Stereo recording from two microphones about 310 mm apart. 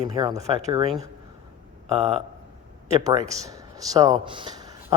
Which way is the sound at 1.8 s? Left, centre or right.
Centre.